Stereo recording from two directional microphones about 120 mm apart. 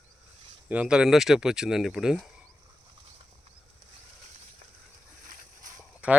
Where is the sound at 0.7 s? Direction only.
10° right (ahead or behind).